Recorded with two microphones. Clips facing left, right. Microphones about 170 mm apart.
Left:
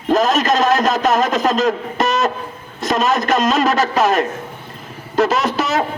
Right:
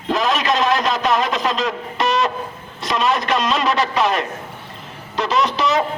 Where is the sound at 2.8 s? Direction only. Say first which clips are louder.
Left 3 dB; 45° left (ahead or behind).